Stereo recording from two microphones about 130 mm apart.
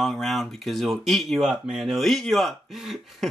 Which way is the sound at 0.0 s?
Centre (ahead or behind).